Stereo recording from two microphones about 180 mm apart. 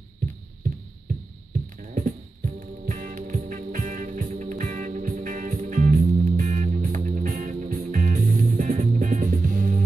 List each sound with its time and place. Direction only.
1.8 s music: 50° right (ahead or behind)